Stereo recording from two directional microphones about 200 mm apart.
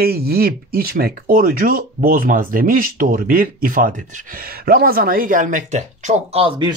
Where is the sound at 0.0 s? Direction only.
50° right (ahead or behind).